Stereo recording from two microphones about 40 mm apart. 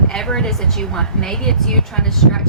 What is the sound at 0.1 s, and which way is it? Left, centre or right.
A woman's voice, centre.